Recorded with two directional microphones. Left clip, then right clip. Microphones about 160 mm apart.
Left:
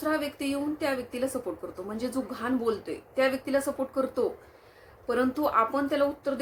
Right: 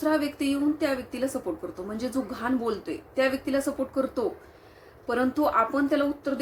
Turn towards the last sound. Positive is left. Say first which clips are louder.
# right 1 dB
turn(degrees=5)  # may be behind; listen again after turning